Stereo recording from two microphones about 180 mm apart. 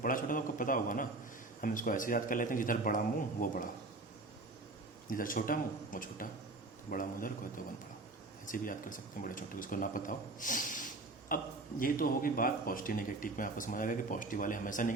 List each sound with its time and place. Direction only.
0.0 s a man's voice: 50° left (ahead or behind)
5.0 s a man's voice: 50° left (ahead or behind)